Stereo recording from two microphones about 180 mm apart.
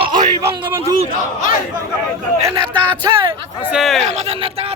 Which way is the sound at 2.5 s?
25° right (ahead or behind).